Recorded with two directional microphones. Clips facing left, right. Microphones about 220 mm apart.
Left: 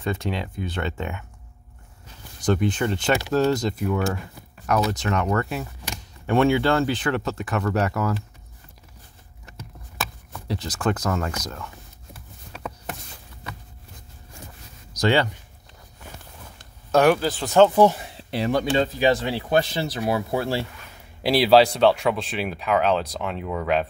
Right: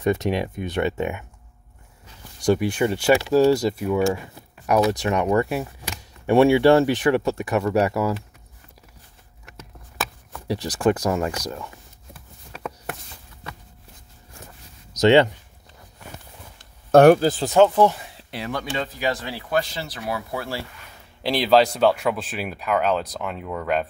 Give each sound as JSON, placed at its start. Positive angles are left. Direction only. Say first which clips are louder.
{"t": 0.0, "sound": "speech", "louder": "right 6 dB", "side_deg": -20}
{"t": 2.4, "sound": "speech", "louder": "right 2 dB", "side_deg": -10}
{"t": 10.5, "sound": "speech", "louder": "right 5 dB", "side_deg": -10}
{"t": 15.0, "sound": "speech", "louder": "right 6 dB", "side_deg": -20}
{"t": 16.9, "sound": "speech", "louder": "right 6 dB", "side_deg": -50}
{"t": 18.3, "sound": "speech", "louder": "left 7 dB", "side_deg": 25}
{"t": 21.2, "sound": "speech", "louder": "left 2 dB", "side_deg": 10}